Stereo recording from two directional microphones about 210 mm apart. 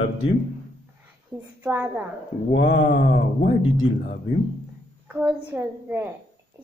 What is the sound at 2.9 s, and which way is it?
Speech, 50° left (ahead or behind).